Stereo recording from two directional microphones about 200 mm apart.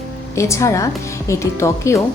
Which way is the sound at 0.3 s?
15° left (ahead or behind).